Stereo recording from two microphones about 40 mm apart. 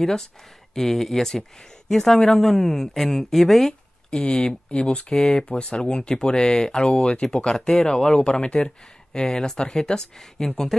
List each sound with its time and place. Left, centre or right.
0.0 s speech: centre
4.3 s speech: left
5.1 s speech: centre
5.5 s speech: left
5.9 s speech: centre
6.9 s speech: left
7.2 s speech: centre
8.2 s speech: left; by 10.9 s centre